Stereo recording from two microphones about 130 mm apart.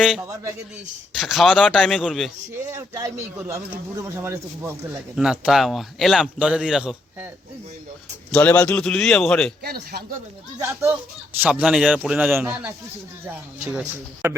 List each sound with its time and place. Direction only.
1.1 s speech: centre (ahead or behind)
2.7 s a man's voice: 25° right (ahead or behind)
5.1 s speech: 5° right (ahead or behind)
8.3 s speech: 10° left (ahead or behind)
10.6 s a man's voice: 20° right (ahead or behind)
11.4 s speech: 10° right (ahead or behind)